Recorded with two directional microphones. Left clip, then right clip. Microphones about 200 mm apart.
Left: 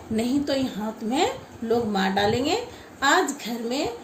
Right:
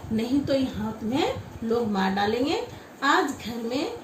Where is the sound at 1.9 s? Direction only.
55° left (ahead or behind).